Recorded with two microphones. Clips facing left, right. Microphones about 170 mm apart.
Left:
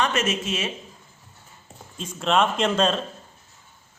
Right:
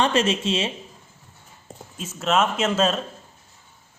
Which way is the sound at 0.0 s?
30° right (ahead or behind).